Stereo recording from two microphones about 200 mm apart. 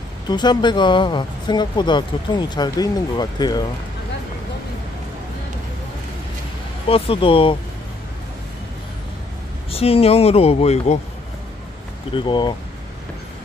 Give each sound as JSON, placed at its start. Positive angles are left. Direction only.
{"t": 0.3, "sound": "speech", "side_deg": 20}
{"t": 6.9, "sound": "speech", "side_deg": 25}
{"t": 9.7, "sound": "speech", "side_deg": 30}
{"t": 12.1, "sound": "speech", "side_deg": 25}